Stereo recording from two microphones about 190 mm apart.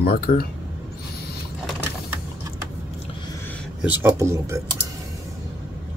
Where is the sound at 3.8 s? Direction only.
10° right (ahead or behind).